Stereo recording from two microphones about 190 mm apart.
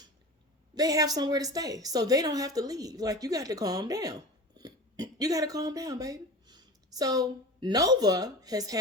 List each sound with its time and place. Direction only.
0.8 s a woman's voice: 20° right (ahead or behind)